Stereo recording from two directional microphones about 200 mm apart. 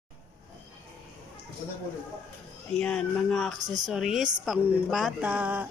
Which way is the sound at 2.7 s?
5° left (ahead or behind).